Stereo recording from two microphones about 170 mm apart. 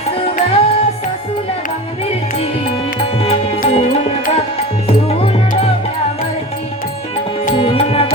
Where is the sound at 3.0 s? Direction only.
35° left (ahead or behind).